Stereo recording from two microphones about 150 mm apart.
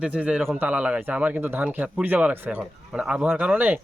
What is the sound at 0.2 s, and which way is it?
Speech, 10° right (ahead or behind).